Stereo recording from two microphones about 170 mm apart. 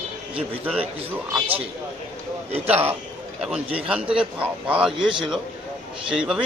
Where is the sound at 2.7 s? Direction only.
10° right (ahead or behind).